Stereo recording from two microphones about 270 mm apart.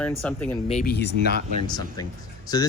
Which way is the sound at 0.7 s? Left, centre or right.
Left.